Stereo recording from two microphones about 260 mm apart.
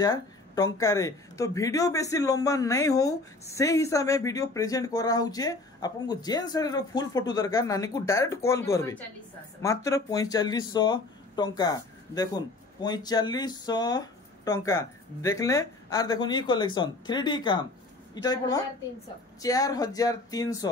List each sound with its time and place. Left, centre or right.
0.0 s speech: centre